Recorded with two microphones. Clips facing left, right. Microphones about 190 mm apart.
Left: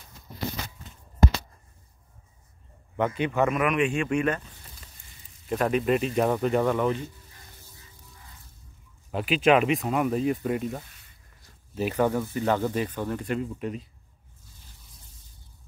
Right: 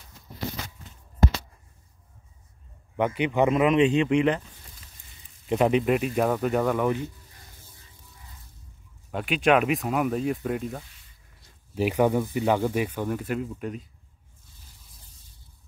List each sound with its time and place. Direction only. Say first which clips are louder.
3.0 s speech: right 2 dB; 15° right (ahead or behind)
5.5 s speech: right 2 dB; 20° right (ahead or behind)
9.1 s speech: left 1 dB; centre (ahead or behind)
11.7 s speech: right 2 dB; 15° right (ahead or behind)